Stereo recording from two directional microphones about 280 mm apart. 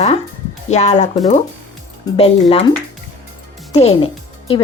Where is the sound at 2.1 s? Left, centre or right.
Centre.